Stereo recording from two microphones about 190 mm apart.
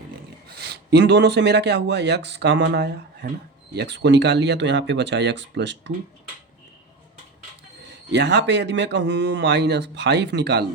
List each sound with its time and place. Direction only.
0.4 s speech: 60° right (ahead or behind)
8.1 s speech: 65° right (ahead or behind)